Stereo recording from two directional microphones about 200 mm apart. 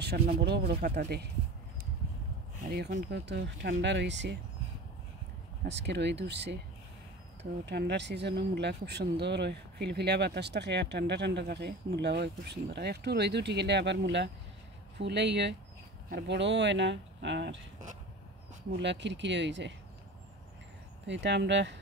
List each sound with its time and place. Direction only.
0.0 s speech: 50° right (ahead or behind)
2.7 s speech: 55° right (ahead or behind)
5.8 s speech: 60° right (ahead or behind)
7.6 s speech: 60° right (ahead or behind)
18.7 s speech: 60° right (ahead or behind)
21.1 s speech: 60° right (ahead or behind)